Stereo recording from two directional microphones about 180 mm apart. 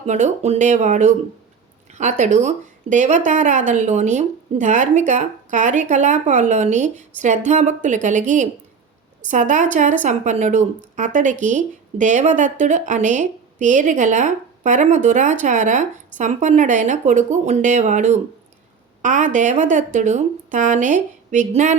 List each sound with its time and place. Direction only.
0.0 s speech: 40° right (ahead or behind)